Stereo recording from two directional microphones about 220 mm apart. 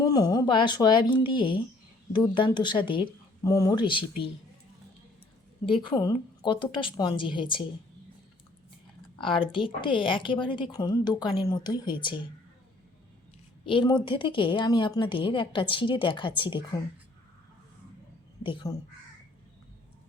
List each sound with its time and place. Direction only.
0.0 s a woman's voice: 20° left (ahead or behind)
5.6 s a woman's voice: 20° left (ahead or behind)
9.1 s a woman's voice: 25° left (ahead or behind)
13.7 s a woman's voice: 20° left (ahead or behind)
18.4 s a woman's voice: 20° left (ahead or behind)